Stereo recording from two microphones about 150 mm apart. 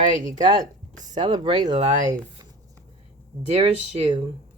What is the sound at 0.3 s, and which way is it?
Speech, 25° right (ahead or behind).